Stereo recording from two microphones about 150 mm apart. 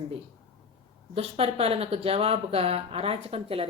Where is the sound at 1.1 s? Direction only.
40° right (ahead or behind).